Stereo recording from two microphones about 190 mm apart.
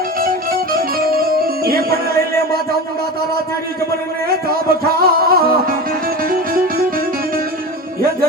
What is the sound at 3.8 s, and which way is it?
Music, 55° right (ahead or behind).